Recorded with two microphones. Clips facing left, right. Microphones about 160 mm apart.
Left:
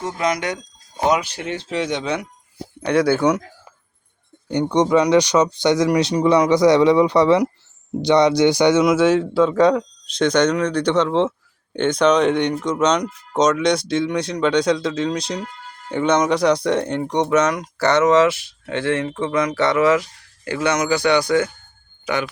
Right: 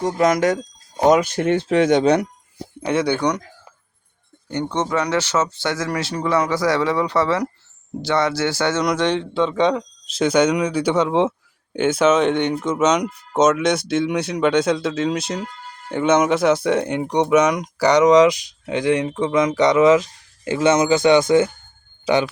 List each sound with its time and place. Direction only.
0.0 s speech: 45° right (ahead or behind)
2.8 s speech: centre (ahead or behind)
4.4 s speech: 15° left (ahead or behind)
8.8 s speech: 5° left (ahead or behind); by 22.3 s 30° right (ahead or behind)